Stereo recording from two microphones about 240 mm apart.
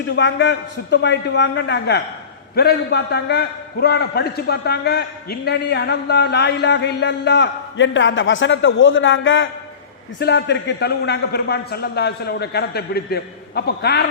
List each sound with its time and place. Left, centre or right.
0.2 s a man's voice: left